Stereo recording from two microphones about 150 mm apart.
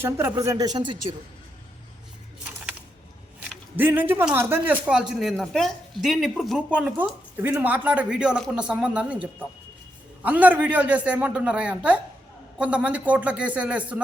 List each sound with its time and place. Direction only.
0.0 s speech: 15° right (ahead or behind)
3.8 s speech: 15° right (ahead or behind)
4.9 s speech: 5° right (ahead or behind)